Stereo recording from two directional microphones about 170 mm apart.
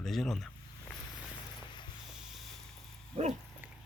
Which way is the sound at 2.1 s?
Centre (ahead or behind).